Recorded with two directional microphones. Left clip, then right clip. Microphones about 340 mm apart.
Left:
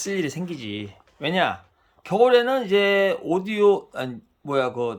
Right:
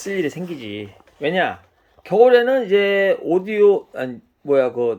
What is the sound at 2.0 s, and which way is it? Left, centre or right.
Speech, left.